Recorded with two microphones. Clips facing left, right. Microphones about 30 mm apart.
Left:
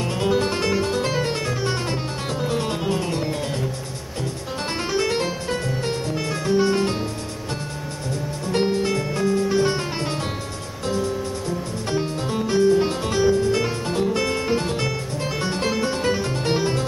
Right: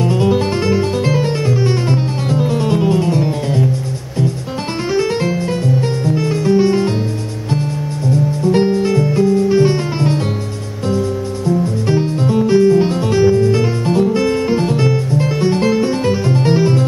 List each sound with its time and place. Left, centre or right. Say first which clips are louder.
0.0 s music: right 7 dB; centre
4.9 s music: right 7 dB; centre
8.5 s music: right 5 dB; centre